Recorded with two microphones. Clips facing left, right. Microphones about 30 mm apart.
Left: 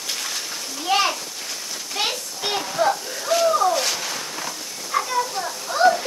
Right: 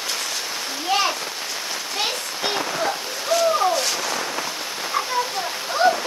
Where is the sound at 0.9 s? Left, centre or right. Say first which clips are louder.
Left 1 dB; centre.